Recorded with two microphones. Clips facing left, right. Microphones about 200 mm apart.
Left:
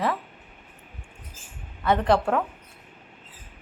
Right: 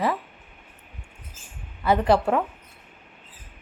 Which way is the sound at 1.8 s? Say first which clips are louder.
Right 1 dB; 5° right (ahead or behind).